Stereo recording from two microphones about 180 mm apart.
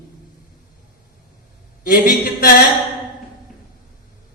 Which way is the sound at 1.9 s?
55° left (ahead or behind).